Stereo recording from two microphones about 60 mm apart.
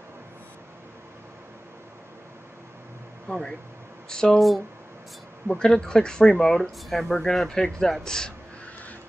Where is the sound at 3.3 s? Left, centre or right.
Centre.